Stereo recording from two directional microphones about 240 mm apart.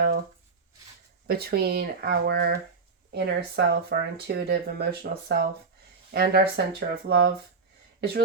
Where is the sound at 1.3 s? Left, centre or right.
Right.